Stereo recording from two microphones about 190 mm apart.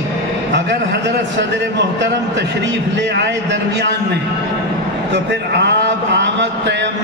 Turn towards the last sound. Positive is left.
turn(degrees=-65)  # may be behind; listen again after turning